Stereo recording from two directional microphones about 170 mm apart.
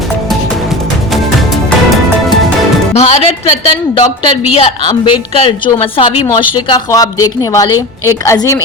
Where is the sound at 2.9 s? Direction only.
40° left (ahead or behind).